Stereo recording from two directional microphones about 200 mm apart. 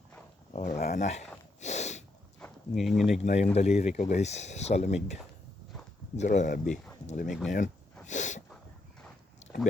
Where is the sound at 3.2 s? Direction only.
35° left (ahead or behind).